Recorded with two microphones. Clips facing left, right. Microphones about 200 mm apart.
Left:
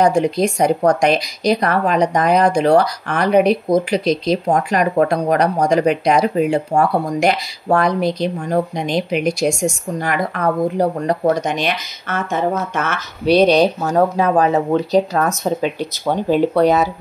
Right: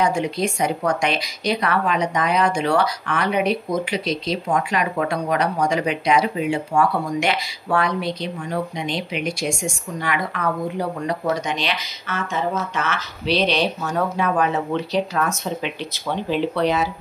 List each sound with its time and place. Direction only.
0.0 s speech: 40° left (ahead or behind)